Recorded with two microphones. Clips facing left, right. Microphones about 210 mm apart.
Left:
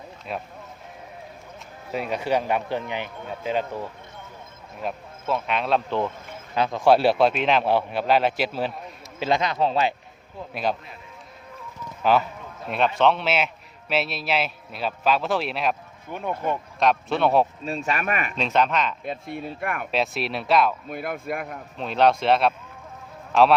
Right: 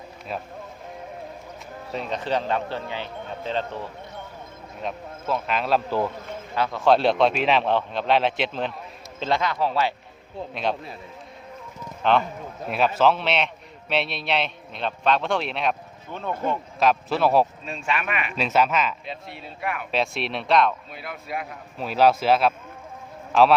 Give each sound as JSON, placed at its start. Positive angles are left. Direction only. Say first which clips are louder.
{"t": 1.9, "sound": "speech", "louder": "left 2 dB", "side_deg": 10}
{"t": 4.8, "sound": "a man's voice", "louder": "left 1 dB", "side_deg": 5}
{"t": 6.6, "sound": "speech", "louder": "left 1 dB", "side_deg": 15}
{"t": 10.5, "sound": "a man's voice", "louder": "left 1 dB", "side_deg": 0}
{"t": 12.1, "sound": "a man's voice", "louder": "even", "side_deg": 5}
{"t": 16.1, "sound": "speech", "louder": "even", "side_deg": 15}
{"t": 16.8, "sound": "a man's voice", "louder": "even", "side_deg": 0}
{"t": 17.7, "sound": "speech", "louder": "left 2 dB", "side_deg": 40}
{"t": 18.3, "sound": "a man's voice", "louder": "right 2 dB", "side_deg": -5}
{"t": 19.0, "sound": "speech", "louder": "left 6 dB", "side_deg": 50}
{"t": 19.9, "sound": "a man's voice", "louder": "even", "side_deg": 0}
{"t": 20.9, "sound": "speech", "louder": "left 4 dB", "side_deg": 50}
{"t": 21.8, "sound": "a man's voice", "louder": "right 1 dB", "side_deg": -5}